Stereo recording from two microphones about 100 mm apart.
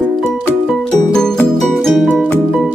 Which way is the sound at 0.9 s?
5° left (ahead or behind).